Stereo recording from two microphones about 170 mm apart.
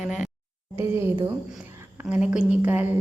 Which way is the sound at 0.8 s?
15° right (ahead or behind).